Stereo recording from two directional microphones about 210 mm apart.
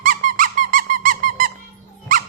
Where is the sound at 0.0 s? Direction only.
40° right (ahead or behind).